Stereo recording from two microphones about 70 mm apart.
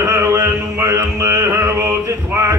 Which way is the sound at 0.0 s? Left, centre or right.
Right.